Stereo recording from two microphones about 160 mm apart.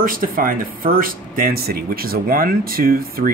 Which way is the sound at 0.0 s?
60° right (ahead or behind).